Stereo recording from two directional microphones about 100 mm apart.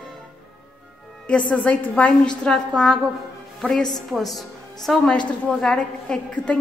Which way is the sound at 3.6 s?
5° left (ahead or behind).